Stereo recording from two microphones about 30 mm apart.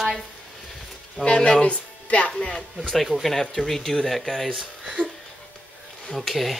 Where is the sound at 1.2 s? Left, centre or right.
Left.